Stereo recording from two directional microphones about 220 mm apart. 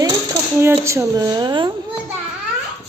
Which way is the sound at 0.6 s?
10° right (ahead or behind).